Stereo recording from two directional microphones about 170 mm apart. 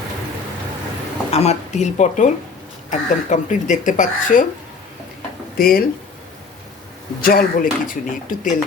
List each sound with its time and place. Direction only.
1.3 s speech: 40° left (ahead or behind)
5.5 s speech: 55° left (ahead or behind)
7.2 s speech: 60° left (ahead or behind)